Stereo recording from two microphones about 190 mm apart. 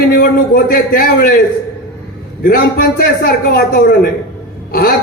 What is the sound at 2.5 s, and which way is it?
A man's voice, 50° left (ahead or behind).